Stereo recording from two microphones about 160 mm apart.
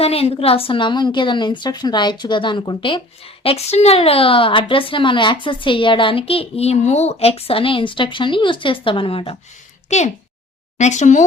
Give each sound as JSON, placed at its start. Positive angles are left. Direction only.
{"t": 0.0, "sound": "a woman's voice", "side_deg": 40}
{"t": 3.4, "sound": "a woman's voice", "side_deg": 40}
{"t": 9.9, "sound": "speech", "side_deg": 45}